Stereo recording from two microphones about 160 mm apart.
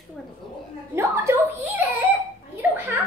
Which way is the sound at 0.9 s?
15° right (ahead or behind).